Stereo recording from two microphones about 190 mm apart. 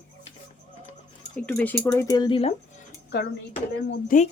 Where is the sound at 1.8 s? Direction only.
15° left (ahead or behind).